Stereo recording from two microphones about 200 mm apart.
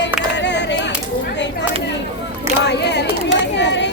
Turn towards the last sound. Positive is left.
turn(degrees=60)  # may be behind; listen again after turning